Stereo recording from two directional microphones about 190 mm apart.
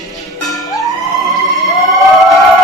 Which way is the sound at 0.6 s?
15° left (ahead or behind).